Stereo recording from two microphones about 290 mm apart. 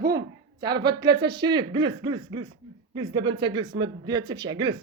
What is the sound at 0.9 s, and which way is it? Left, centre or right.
Speech, centre.